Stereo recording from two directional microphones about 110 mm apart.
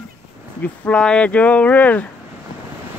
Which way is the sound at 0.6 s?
10° left (ahead or behind).